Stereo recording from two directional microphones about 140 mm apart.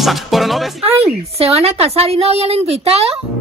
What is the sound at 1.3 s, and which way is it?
Speech, 45° right (ahead or behind).